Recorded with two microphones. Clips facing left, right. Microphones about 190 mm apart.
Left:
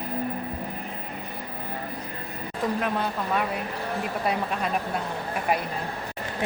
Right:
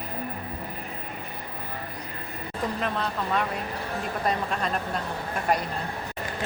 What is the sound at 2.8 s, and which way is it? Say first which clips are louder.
Speech: left 1 dB; 5° left (ahead or behind).